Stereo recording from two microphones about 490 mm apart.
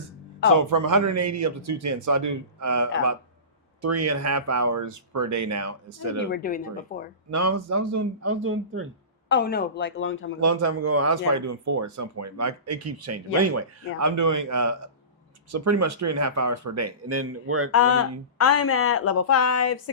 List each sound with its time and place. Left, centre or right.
0.5 s speech: right
6.3 s speech: centre
7.3 s speech: right
9.3 s speech: centre
10.4 s speech: right
17.7 s speech: left